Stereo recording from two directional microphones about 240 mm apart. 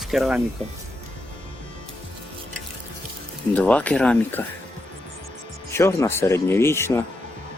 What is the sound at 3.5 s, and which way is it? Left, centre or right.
Speech, centre.